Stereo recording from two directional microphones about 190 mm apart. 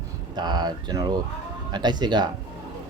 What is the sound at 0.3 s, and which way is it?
Speech, 20° right (ahead or behind).